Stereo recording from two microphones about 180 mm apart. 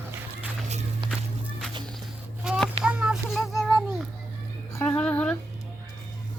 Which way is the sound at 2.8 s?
5° right (ahead or behind).